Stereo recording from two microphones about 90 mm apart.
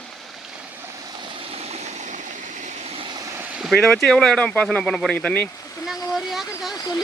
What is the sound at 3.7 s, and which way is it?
Speech, 5° left (ahead or behind).